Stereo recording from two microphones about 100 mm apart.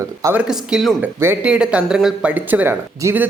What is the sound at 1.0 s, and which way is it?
Speech, 25° right (ahead or behind).